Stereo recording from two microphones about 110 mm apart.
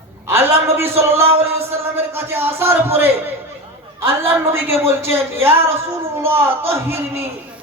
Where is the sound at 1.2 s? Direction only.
65° right (ahead or behind).